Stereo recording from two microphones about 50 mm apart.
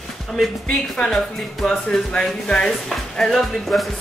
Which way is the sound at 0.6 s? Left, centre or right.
Centre.